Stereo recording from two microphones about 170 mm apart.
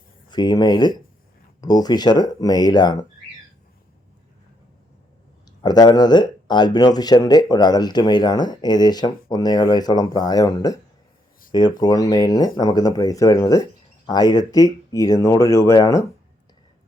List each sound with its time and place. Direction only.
0.3 s speech: 25° left (ahead or behind)
5.6 s speech: 25° left (ahead or behind)
11.8 s speech: 25° left (ahead or behind)